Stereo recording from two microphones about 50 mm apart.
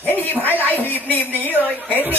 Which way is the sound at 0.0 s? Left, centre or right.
Left.